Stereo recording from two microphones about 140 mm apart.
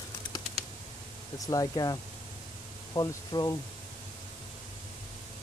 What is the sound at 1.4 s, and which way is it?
Speech, 25° left (ahead or behind).